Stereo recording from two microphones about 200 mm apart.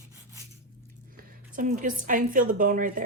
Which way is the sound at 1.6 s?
40° right (ahead or behind).